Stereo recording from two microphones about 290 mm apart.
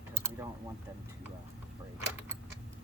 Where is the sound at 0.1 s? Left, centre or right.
Centre.